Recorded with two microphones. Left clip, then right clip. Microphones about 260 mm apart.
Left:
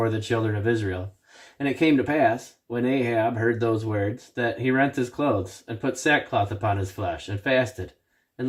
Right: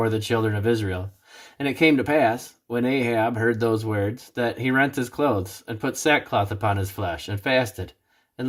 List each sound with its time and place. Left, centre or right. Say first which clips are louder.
0.0 s speech: right 2 dB; right